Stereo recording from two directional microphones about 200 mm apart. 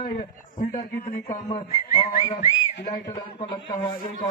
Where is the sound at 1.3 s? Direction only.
30° left (ahead or behind).